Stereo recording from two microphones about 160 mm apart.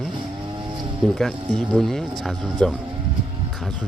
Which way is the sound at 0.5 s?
30° right (ahead or behind).